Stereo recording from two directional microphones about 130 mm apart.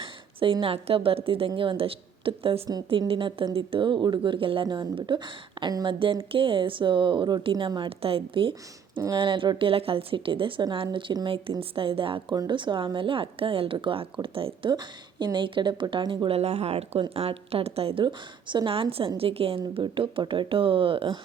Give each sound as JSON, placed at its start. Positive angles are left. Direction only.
{"t": 0.0, "sound": "a sound", "side_deg": -40}
{"t": 0.6, "sound": "a woman's voice", "side_deg": -45}
{"t": 16.4, "sound": "speech", "side_deg": -55}